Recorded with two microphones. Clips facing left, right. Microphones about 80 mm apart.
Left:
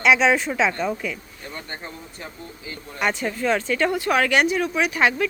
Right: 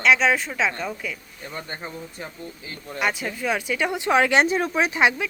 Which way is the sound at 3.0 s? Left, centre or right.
Centre.